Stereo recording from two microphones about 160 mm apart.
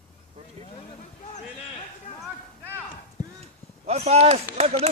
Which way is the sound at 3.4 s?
40° right (ahead or behind).